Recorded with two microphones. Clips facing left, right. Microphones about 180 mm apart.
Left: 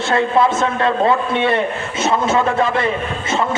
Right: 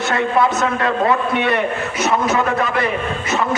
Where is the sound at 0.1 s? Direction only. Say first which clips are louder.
Left 2 dB; 25° left (ahead or behind).